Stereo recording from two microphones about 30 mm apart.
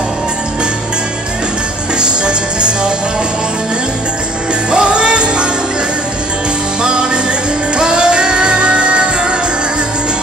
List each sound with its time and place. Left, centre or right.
2.0 s music: right
4.6 s music: right
6.8 s music: right